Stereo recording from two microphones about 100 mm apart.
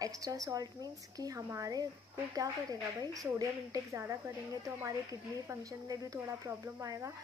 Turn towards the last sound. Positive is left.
turn(degrees=-30)  # may be behind; listen again after turning